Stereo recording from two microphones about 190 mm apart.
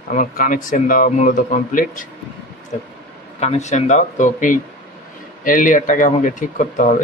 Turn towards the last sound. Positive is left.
turn(degrees=40)  # may be behind; listen again after turning